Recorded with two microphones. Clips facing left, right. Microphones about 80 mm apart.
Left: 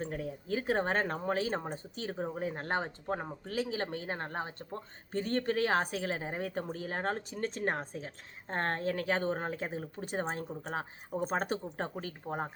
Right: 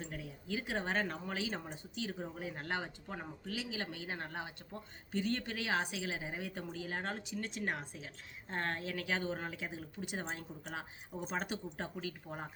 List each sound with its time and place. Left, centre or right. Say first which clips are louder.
0.0 s speech: left 8 dB; left